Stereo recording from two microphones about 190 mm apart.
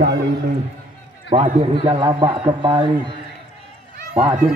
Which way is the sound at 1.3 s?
35° right (ahead or behind).